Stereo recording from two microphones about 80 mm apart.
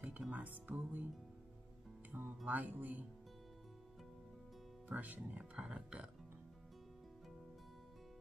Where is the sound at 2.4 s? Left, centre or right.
Centre.